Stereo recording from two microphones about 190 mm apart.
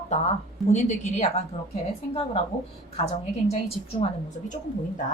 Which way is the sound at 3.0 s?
35° left (ahead or behind).